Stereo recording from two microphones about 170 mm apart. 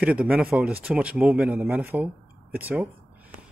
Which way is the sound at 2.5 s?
10° right (ahead or behind).